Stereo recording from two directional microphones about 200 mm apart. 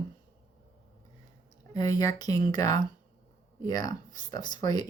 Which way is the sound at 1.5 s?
20° left (ahead or behind).